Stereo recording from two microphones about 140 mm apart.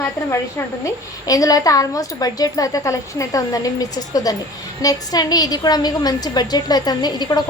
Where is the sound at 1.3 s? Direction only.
25° left (ahead or behind).